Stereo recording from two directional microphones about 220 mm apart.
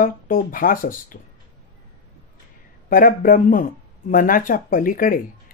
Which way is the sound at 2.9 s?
40° left (ahead or behind).